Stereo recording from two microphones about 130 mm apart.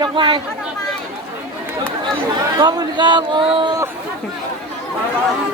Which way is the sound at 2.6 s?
35° right (ahead or behind).